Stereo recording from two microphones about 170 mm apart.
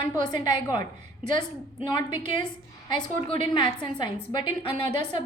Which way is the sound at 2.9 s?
30° left (ahead or behind).